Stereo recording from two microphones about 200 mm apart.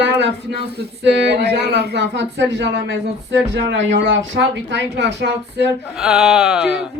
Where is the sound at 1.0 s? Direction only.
60° right (ahead or behind).